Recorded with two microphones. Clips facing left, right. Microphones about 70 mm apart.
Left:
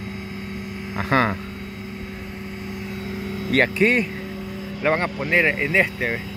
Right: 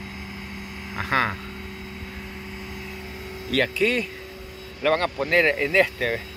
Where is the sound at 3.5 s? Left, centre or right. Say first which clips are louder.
Left 4 dB; left.